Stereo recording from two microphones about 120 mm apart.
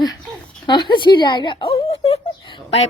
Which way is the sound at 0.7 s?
40° left (ahead or behind).